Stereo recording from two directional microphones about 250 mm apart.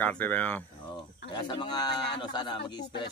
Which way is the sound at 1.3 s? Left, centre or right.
Centre.